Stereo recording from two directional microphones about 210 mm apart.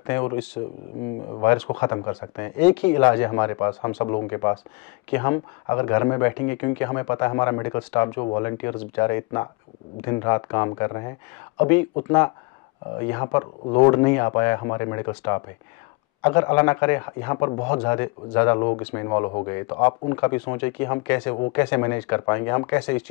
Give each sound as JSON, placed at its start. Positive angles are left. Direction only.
{"t": 0.0, "sound": "speech", "side_deg": 15}
{"t": 18.7, "sound": "speech", "side_deg": 25}